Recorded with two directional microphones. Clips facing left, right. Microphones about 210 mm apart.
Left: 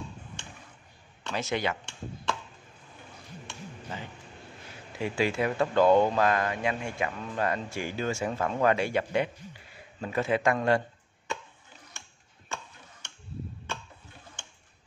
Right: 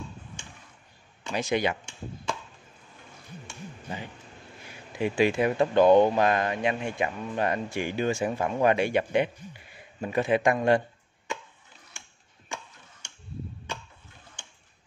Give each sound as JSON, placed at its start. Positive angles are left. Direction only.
{"t": 1.2, "sound": "speech", "side_deg": -15}
{"t": 3.9, "sound": "a man's voice", "side_deg": -15}